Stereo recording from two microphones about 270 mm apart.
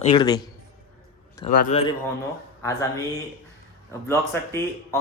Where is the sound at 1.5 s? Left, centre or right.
Left.